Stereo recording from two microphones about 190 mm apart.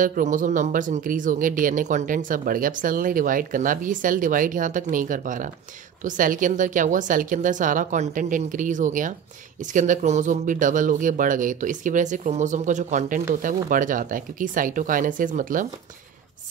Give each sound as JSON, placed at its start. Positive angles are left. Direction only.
{"t": 0.0, "sound": "speech", "side_deg": -45}